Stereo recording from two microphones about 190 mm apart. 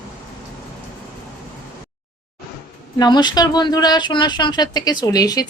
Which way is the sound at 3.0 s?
25° left (ahead or behind).